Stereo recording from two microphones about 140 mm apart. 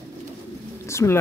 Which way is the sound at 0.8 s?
20° left (ahead or behind).